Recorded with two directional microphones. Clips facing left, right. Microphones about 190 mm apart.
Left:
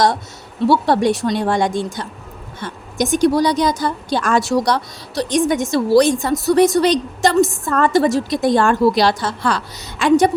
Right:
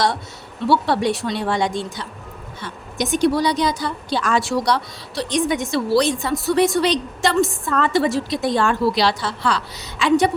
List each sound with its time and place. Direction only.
0.7 s a woman's voice: 45° left (ahead or behind)